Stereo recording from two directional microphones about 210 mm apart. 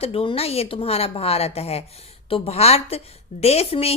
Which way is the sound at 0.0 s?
25° left (ahead or behind).